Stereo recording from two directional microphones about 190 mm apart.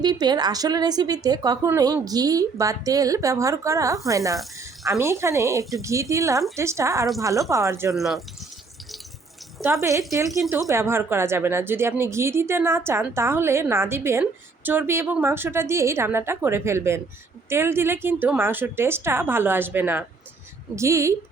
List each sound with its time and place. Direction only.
0.0 s a woman's voice: 20° right (ahead or behind)
7.9 s speech: centre (ahead or behind)
9.6 s a woman's voice: centre (ahead or behind)
10.1 s a woman's voice: 15° right (ahead or behind)